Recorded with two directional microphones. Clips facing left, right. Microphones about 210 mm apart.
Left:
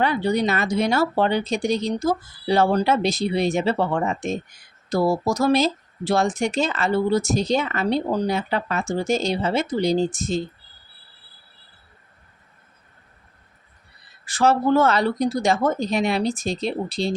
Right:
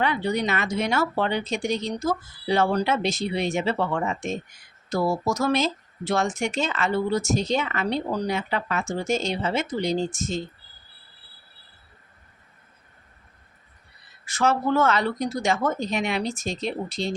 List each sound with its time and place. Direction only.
0.0 s speech: 35° left (ahead or behind)
14.3 s speech: 35° left (ahead or behind)